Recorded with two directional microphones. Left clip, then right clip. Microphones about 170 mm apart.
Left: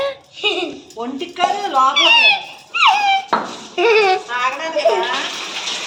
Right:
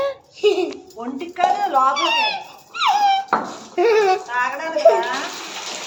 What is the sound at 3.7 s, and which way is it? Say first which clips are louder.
Speech: left 2 dB; 40° right (ahead or behind).